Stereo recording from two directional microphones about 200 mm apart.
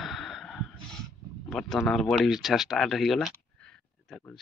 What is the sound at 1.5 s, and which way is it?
Speech, centre (ahead or behind).